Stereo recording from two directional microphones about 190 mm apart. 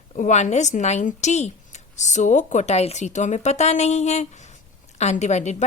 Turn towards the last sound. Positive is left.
turn(degrees=35)  # may be behind; listen again after turning